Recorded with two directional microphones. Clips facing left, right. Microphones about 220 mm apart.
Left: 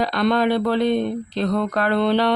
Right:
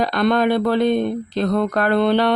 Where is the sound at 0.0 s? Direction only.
50° right (ahead or behind).